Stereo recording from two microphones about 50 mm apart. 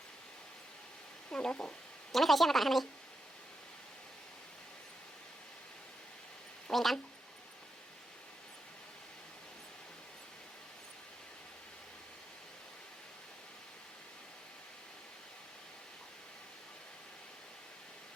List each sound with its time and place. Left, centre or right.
1.3 s speech: centre
2.1 s a woman's voice: centre
6.7 s a woman's voice: centre